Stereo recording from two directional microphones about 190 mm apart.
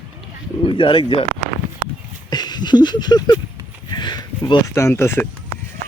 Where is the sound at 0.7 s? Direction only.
25° left (ahead or behind).